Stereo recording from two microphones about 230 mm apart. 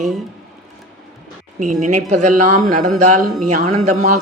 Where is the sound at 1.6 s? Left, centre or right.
Right.